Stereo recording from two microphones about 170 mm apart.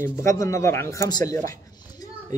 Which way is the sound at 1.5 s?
20° left (ahead or behind).